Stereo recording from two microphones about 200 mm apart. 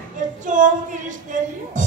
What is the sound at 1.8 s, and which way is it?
Speech, 40° right (ahead or behind).